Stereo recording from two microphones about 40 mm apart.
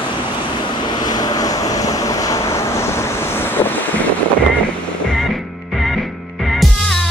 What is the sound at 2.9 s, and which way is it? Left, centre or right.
Waves, left.